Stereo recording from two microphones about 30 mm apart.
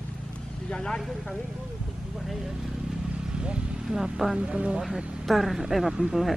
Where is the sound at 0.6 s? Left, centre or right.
Left.